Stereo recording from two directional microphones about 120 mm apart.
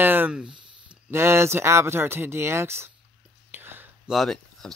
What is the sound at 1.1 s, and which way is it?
Speech, 20° right (ahead or behind).